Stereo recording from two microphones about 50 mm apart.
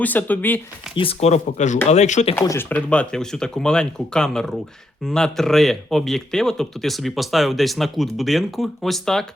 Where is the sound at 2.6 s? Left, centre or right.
Left.